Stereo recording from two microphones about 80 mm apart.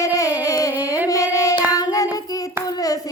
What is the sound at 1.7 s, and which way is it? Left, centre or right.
Child singing, left.